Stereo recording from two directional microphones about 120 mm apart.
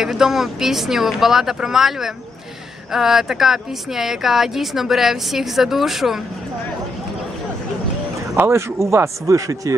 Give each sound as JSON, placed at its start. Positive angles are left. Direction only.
{"t": 0.0, "sound": "speech", "side_deg": -5}
{"t": 8.4, "sound": "speech", "side_deg": -20}